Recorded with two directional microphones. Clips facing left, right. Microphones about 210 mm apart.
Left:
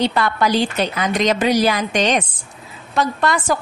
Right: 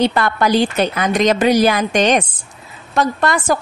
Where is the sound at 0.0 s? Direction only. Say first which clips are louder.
Right 2 dB; 50° right (ahead or behind).